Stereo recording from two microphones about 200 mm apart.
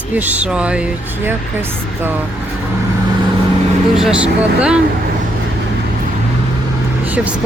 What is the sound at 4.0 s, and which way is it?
Speech, 5° right (ahead or behind).